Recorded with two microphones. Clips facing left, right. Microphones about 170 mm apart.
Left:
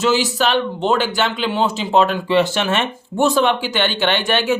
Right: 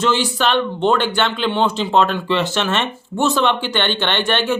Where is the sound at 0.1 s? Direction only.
5° left (ahead or behind).